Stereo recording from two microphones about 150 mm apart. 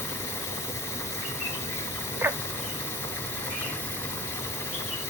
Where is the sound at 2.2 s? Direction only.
15° right (ahead or behind).